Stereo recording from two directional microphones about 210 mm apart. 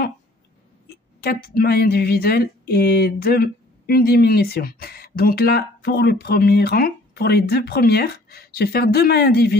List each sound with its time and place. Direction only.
0.8 s speech: 45° left (ahead or behind)